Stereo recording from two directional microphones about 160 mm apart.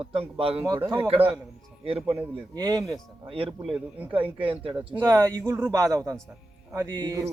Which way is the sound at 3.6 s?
5° right (ahead or behind).